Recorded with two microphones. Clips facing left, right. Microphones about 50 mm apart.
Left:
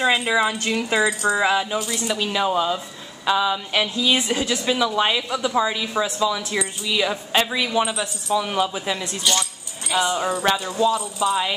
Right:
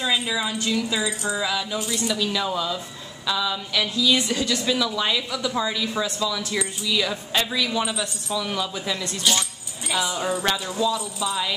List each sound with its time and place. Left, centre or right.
0.0 s speech: left
1.9 s a woman's voice: centre
9.2 s speech: centre
11.1 s a woman's voice: left